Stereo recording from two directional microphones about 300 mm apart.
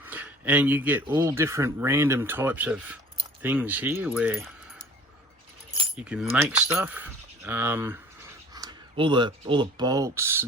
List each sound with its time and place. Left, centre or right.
0.0 s speech: centre
6.0 s speech: centre